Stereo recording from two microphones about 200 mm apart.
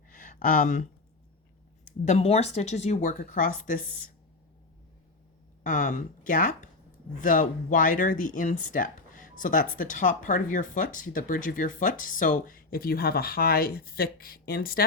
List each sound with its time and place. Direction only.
0.1 s a sound: 40° left (ahead or behind)
2.0 s a woman's voice: 30° left (ahead or behind)
5.6 s a woman's voice: 40° left (ahead or behind)